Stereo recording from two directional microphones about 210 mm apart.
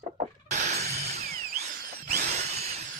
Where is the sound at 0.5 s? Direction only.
35° right (ahead or behind).